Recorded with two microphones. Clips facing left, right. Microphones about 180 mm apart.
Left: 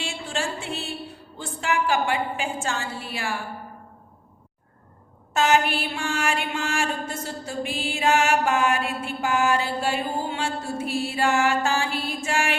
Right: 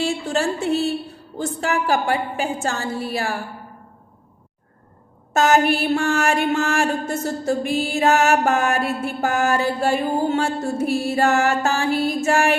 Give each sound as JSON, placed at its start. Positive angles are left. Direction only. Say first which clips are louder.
{"t": 0.0, "sound": "music", "louder": "right 8 dB", "side_deg": -40}
{"t": 1.4, "sound": "a woman's voice", "louder": "right 3 dB", "side_deg": -40}
{"t": 5.3, "sound": "mantra", "louder": "right 4 dB", "side_deg": -45}